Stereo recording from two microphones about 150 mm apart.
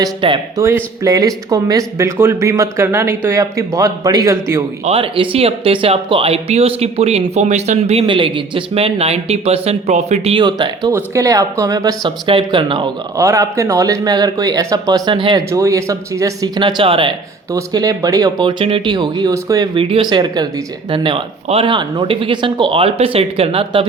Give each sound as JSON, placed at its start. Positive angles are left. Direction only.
{"t": 0.0, "sound": "speech", "side_deg": -35}
{"t": 0.5, "sound": "speech", "side_deg": -20}
{"t": 4.9, "sound": "speech", "side_deg": -40}
{"t": 10.4, "sound": "speech", "side_deg": -30}
{"t": 13.1, "sound": "speech", "side_deg": -20}
{"t": 15.4, "sound": "speech", "side_deg": -20}
{"t": 17.5, "sound": "speech", "side_deg": -25}
{"t": 19.7, "sound": "speech", "side_deg": -35}